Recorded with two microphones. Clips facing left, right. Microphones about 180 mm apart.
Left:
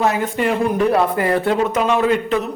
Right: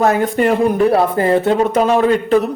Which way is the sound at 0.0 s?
45° right (ahead or behind).